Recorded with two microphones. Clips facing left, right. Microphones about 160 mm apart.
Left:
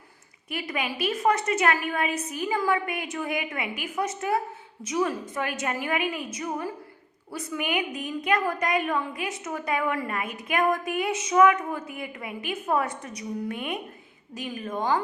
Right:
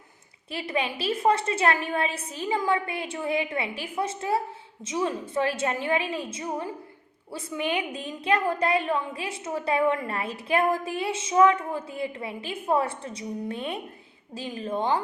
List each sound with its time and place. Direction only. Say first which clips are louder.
0.5 s a woman's voice: right 2 dB; 30° right (ahead or behind)